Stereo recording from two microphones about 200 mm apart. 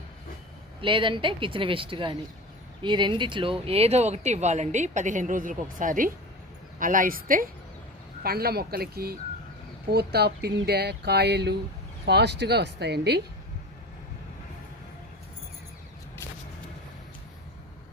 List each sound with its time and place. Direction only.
0.8 s speech: 25° right (ahead or behind); by 13.2 s 55° right (ahead or behind)